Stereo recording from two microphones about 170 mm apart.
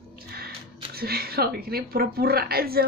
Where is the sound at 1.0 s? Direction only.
65° right (ahead or behind).